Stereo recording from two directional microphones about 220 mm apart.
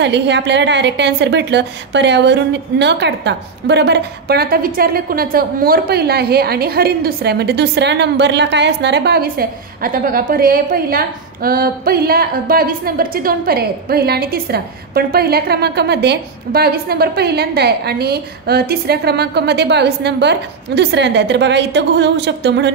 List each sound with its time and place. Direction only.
0.0 s a woman's voice: 50° right (ahead or behind)